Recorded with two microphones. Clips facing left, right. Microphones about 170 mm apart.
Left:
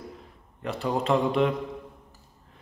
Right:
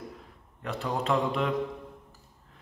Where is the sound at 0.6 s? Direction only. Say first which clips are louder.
Left 4 dB; centre (ahead or behind).